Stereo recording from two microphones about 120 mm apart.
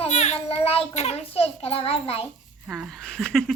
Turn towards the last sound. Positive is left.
turn(degrees=5)  # may be behind; listen again after turning